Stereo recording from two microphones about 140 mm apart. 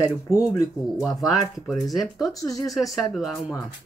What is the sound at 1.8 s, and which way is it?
Speech, centre (ahead or behind).